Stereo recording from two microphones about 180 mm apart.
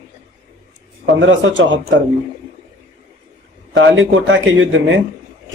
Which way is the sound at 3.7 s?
90° right.